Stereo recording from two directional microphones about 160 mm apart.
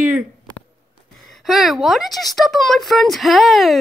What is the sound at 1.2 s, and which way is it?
A woman's voice, centre (ahead or behind).